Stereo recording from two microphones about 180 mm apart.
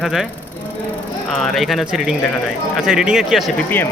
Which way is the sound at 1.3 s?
Centre (ahead or behind).